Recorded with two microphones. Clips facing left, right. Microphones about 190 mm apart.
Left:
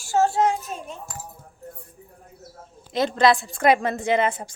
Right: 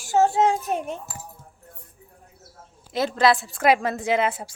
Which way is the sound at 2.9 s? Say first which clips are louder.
Left 1 dB; 5° right (ahead or behind).